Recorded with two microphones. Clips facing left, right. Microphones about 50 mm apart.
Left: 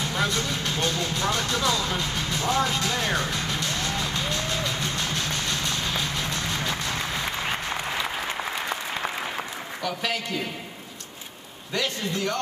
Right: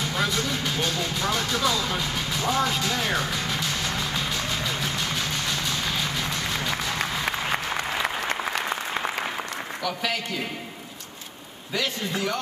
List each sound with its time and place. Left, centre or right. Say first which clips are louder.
0.0 s vehicle: even; centre
7.5 s applause: right 2 dB; centre